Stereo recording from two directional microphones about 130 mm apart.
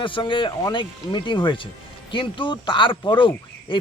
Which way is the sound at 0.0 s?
40° left (ahead or behind).